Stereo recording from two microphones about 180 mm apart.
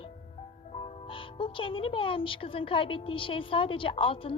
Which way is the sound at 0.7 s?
35° left (ahead or behind).